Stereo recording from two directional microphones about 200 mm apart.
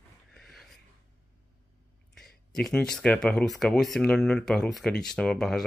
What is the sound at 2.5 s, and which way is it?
Speech, centre (ahead or behind).